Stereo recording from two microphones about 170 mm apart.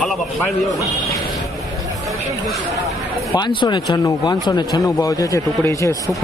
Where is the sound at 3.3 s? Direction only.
30° left (ahead or behind).